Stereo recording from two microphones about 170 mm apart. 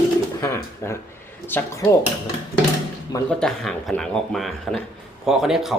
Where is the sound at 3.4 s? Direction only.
5° left (ahead or behind).